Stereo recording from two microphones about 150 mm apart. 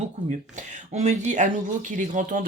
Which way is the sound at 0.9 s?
55° right (ahead or behind).